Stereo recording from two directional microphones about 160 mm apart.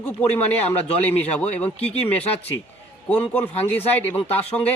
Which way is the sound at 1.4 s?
10° left (ahead or behind).